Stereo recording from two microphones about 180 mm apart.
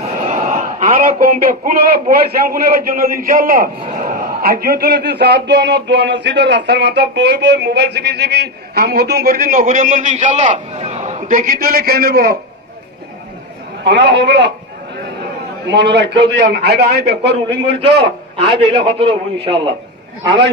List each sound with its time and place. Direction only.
0.0 s a man's voice: 40° right (ahead or behind); by 12.4 s 55° right (ahead or behind)
13.8 s a man's voice: 75° right (ahead or behind)
15.6 s a man's voice: 75° right (ahead or behind)
18.7 s a man's voice: 30° right (ahead or behind)